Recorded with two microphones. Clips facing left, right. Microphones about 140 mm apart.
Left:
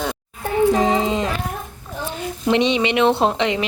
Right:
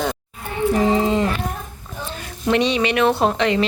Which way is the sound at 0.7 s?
20° left (ahead or behind).